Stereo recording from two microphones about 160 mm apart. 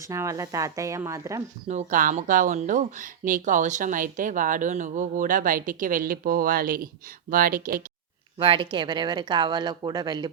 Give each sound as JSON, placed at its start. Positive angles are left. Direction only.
{"t": 0.0, "sound": "speech", "side_deg": -20}
{"t": 1.6, "sound": "speech", "side_deg": -45}
{"t": 8.4, "sound": "speech", "side_deg": -30}